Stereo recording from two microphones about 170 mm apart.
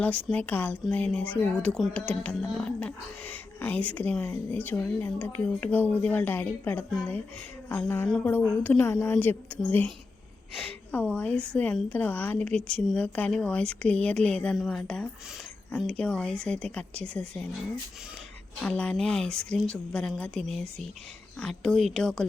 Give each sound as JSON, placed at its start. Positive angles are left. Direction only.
{"t": 0.0, "sound": "a woman's voice", "side_deg": 10}
{"t": 18.6, "sound": "a woman's voice", "side_deg": 5}